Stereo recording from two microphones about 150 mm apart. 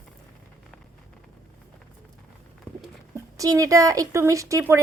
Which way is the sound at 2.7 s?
10° left (ahead or behind).